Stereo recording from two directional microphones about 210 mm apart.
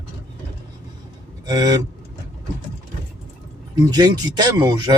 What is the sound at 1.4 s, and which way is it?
Speech, 20° right (ahead or behind).